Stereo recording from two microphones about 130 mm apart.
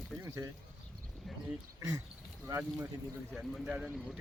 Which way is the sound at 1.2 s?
Centre (ahead or behind).